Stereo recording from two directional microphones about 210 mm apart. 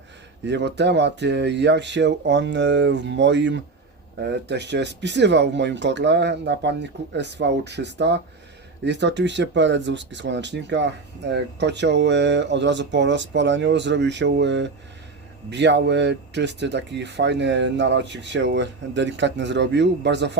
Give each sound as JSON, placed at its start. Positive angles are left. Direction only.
{"t": 0.4, "sound": "speech", "side_deg": -55}